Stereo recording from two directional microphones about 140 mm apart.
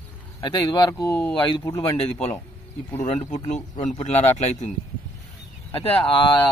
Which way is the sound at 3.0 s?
55° left (ahead or behind).